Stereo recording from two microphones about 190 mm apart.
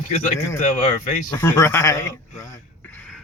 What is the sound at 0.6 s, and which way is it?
Speech, 45° left (ahead or behind).